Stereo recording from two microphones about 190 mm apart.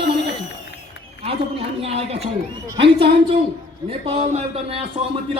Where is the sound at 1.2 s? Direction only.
30° right (ahead or behind).